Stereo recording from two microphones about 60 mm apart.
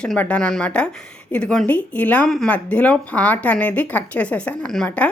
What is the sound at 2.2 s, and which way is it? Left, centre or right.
Speech, centre.